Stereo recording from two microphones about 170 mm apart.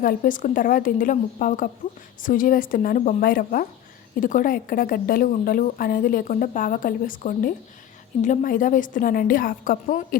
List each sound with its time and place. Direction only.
0.0 s a woman's voice: 55° left (ahead or behind)